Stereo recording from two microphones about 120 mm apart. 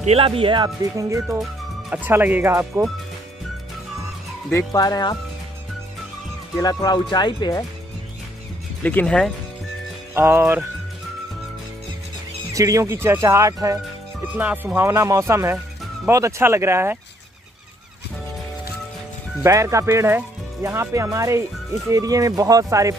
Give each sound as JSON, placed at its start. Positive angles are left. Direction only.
{"t": 0.0, "sound": "speech", "side_deg": -55}
{"t": 0.9, "sound": "speech", "side_deg": -25}
{"t": 1.9, "sound": "speech", "side_deg": -15}
{"t": 4.7, "sound": "speech", "side_deg": 30}
{"t": 6.6, "sound": "speech", "side_deg": 30}
{"t": 8.8, "sound": "speech", "side_deg": 10}
{"t": 10.1, "sound": "speech", "side_deg": -20}
{"t": 12.5, "sound": "speech", "side_deg": -30}
{"t": 14.2, "sound": "speech", "side_deg": -15}
{"t": 19.4, "sound": "speech", "side_deg": -25}